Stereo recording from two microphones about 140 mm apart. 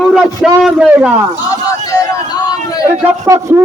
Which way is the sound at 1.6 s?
25° left (ahead or behind).